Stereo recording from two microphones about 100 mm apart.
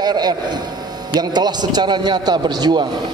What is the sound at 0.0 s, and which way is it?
Speech, 45° right (ahead or behind).